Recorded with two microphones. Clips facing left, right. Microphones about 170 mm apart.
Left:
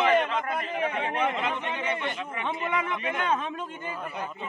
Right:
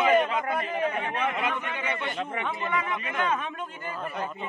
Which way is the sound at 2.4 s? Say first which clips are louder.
Left 3 dB; 20° left (ahead or behind).